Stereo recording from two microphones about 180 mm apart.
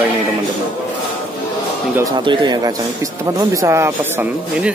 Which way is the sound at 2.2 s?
25° right (ahead or behind).